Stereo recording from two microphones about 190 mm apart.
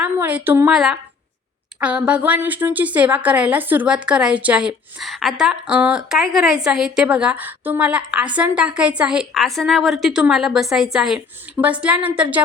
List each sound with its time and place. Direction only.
0.0 s a woman's voice: 10° right (ahead or behind)